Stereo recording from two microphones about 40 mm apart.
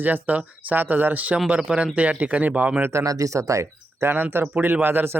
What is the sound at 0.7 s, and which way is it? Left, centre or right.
Speech, right.